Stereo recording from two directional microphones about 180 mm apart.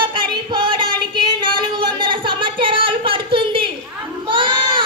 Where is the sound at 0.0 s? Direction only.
25° right (ahead or behind).